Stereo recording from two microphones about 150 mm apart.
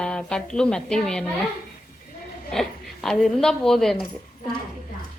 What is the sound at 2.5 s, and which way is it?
A woman's voice, centre (ahead or behind).